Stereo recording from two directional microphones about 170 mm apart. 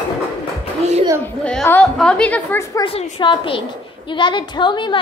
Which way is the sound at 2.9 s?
35° left (ahead or behind).